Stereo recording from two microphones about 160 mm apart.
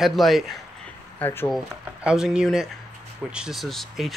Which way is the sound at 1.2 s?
15° left (ahead or behind).